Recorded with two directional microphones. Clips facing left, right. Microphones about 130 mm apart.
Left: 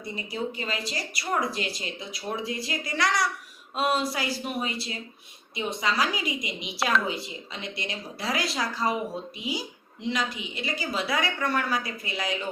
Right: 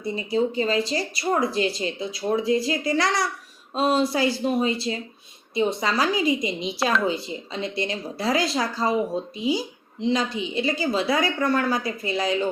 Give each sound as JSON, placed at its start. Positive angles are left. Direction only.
{"t": 0.3, "sound": "a woman's voice", "side_deg": -30}